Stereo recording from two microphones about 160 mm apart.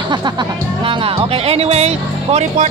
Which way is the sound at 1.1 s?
40° right (ahead or behind).